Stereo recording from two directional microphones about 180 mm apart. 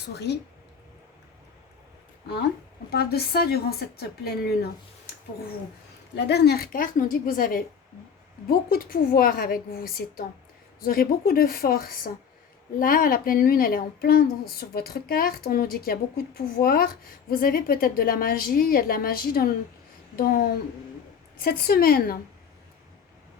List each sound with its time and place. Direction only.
0.1 s a woman's voice: 65° left (ahead or behind)
2.9 s a woman's voice: 60° left (ahead or behind)
6.1 s a woman's voice: 65° left (ahead or behind)
21.3 s a woman's voice: 55° left (ahead or behind)